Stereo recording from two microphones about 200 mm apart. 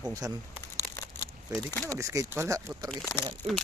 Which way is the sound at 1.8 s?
15° right (ahead or behind).